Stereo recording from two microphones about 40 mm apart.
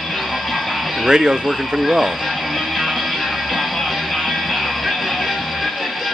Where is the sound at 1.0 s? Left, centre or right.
Centre.